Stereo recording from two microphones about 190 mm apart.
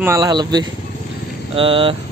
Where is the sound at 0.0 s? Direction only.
15° right (ahead or behind).